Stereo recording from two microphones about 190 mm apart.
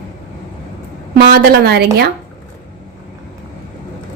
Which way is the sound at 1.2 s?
55° right (ahead or behind).